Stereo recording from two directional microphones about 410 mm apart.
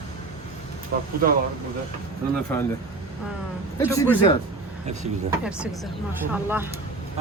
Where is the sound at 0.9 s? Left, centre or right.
Right.